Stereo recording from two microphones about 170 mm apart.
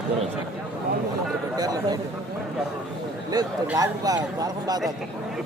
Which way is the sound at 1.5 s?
20° right (ahead or behind).